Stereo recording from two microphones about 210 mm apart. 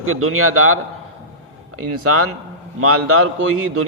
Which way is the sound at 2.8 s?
90° right.